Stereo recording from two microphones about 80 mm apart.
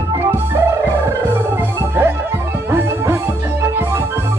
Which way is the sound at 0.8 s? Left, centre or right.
Right.